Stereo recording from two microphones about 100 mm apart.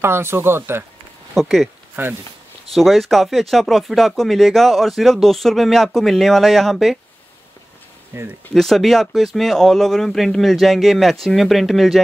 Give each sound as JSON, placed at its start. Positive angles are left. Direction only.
{"t": 0.0, "sound": "speech", "side_deg": -25}
{"t": 1.3, "sound": "speech", "side_deg": 0}
{"t": 2.0, "sound": "speech", "side_deg": -20}
{"t": 2.7, "sound": "speech", "side_deg": 0}
{"t": 8.1, "sound": "speech", "side_deg": -25}
{"t": 8.5, "sound": "speech", "side_deg": 0}